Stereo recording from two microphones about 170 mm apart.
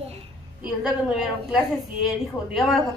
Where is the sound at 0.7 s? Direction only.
5° right (ahead or behind).